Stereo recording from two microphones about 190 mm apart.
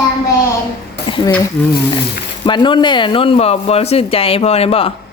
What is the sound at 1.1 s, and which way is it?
Speech, 25° left (ahead or behind).